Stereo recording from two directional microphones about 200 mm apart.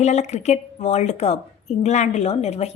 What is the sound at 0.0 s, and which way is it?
A woman's voice, 35° left (ahead or behind).